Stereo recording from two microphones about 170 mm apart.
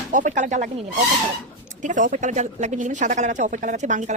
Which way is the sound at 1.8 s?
50° right (ahead or behind).